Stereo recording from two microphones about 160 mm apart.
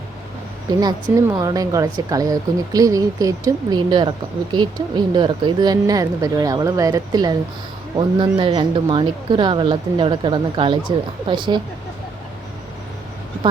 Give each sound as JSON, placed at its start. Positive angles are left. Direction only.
{"t": 0.8, "sound": "speech", "side_deg": -25}